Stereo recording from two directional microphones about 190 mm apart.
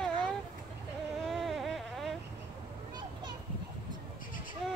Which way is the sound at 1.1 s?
Centre (ahead or behind).